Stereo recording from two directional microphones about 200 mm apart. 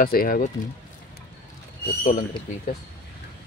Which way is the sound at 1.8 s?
50° left (ahead or behind).